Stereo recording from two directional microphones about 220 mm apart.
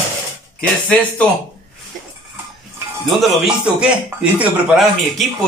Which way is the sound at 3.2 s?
5° right (ahead or behind).